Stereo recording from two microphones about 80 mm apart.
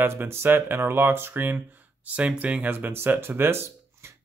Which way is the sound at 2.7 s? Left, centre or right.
Right.